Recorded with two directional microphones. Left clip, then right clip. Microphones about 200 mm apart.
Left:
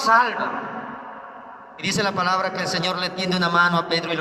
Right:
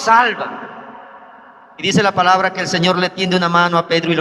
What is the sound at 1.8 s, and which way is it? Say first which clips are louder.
A man's voice: right 8 dB; 50° right (ahead or behind).